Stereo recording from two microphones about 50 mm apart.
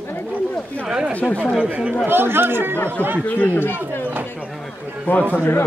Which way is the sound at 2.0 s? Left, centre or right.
Right.